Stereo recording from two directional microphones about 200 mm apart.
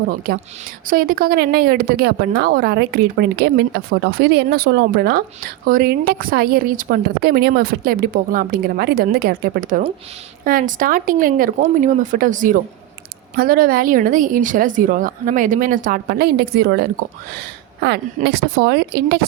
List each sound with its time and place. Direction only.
0.3 s speech: 50° right (ahead or behind)